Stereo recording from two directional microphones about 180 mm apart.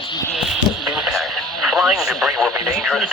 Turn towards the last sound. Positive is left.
turn(degrees=0)  # may be behind; listen again after turning